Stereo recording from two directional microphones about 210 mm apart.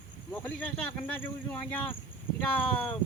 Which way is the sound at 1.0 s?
10° left (ahead or behind).